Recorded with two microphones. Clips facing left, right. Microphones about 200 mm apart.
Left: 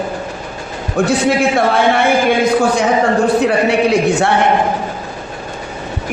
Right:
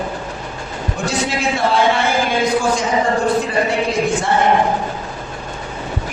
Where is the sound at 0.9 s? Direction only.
55° left (ahead or behind).